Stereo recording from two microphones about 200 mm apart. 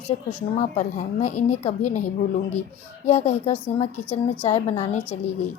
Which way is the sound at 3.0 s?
30° left (ahead or behind).